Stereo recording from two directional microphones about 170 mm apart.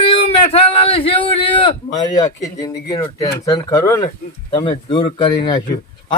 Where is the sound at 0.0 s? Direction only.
35° left (ahead or behind).